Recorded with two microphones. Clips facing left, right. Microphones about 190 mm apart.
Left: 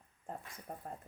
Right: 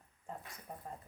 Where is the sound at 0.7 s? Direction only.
50° left (ahead or behind).